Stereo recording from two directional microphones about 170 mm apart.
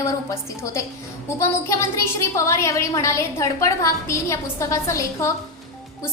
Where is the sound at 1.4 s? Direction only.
15° left (ahead or behind).